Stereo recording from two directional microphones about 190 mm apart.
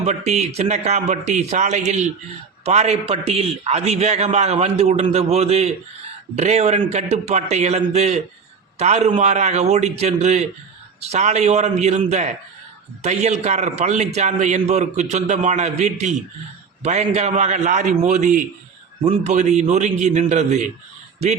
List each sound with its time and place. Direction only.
0.0 s a man's voice: 35° right (ahead or behind)